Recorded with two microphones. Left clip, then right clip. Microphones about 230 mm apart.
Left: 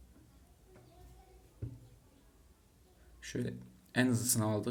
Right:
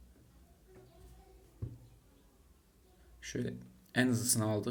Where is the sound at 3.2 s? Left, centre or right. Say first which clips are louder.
Even; centre.